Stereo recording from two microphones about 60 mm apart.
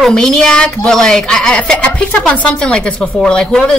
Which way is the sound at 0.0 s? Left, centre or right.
Centre.